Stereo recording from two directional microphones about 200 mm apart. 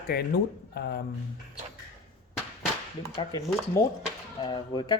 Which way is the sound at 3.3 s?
20° left (ahead or behind).